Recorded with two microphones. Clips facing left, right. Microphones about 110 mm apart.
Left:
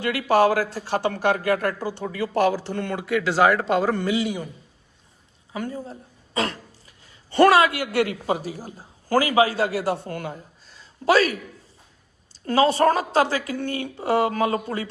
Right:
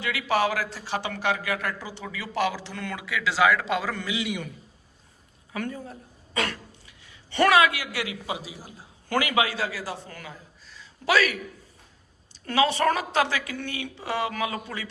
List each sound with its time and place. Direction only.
0.0 s speech: 45° left (ahead or behind)
5.5 s speech: 30° left (ahead or behind)
9.7 s speech: 60° left (ahead or behind); by 11.3 s 40° left (ahead or behind)
12.5 s a woman's voice: 40° left (ahead or behind)